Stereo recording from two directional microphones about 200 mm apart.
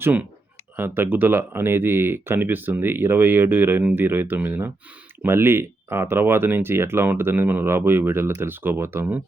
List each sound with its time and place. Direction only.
0.0 s speech: 10° right (ahead or behind)